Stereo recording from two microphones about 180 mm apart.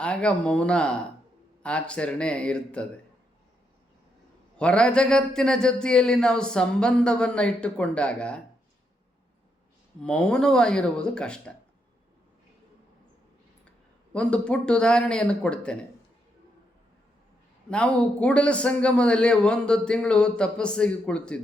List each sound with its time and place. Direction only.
0.0 s a man's voice: 5° left (ahead or behind)
4.5 s a man's voice: 5° left (ahead or behind)
10.0 s a man's voice: 5° left (ahead or behind)
14.1 s a man's voice: 5° left (ahead or behind)
17.7 s a man's voice: 5° left (ahead or behind)